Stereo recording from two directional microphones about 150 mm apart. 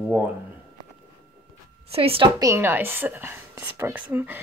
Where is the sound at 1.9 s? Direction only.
40° right (ahead or behind).